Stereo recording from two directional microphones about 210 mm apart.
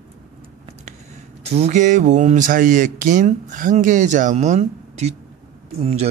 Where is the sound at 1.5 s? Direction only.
30° right (ahead or behind).